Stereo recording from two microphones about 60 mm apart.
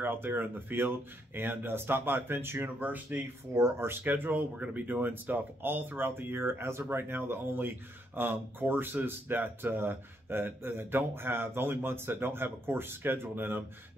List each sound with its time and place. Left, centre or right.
0.0 s speech: right
3.5 s speech: right
4.0 s speech: right